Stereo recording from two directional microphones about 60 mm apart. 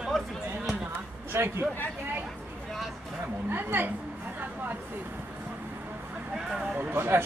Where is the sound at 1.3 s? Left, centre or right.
Right.